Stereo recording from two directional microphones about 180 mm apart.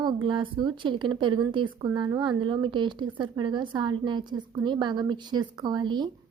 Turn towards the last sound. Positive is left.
turn(degrees=-25)  # may be behind; listen again after turning